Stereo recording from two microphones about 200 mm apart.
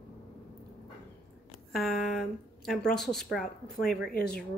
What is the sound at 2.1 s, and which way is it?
Speech, centre (ahead or behind).